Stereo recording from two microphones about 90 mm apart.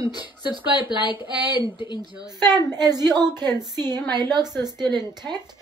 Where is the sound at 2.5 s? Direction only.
25° left (ahead or behind).